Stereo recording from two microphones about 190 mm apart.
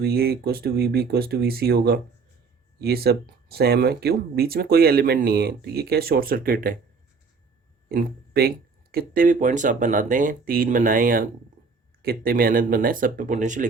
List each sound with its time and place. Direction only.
0.0 s speech: 55° right (ahead or behind)
7.9 s speech: 55° right (ahead or behind)